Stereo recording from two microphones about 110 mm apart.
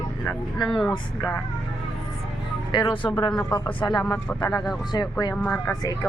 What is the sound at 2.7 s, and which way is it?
Speech, 45° left (ahead or behind).